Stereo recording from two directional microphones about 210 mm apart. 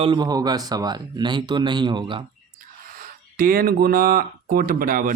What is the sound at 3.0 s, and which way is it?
Speech, 45° right (ahead or behind).